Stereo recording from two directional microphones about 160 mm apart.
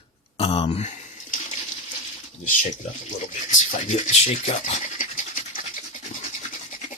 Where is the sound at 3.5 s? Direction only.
50° left (ahead or behind).